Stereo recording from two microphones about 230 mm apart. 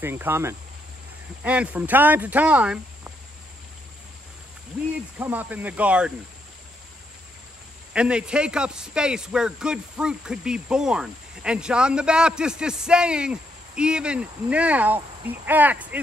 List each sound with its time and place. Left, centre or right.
0.0 s speech: centre
5.2 s speech: centre
7.9 s a man's voice: centre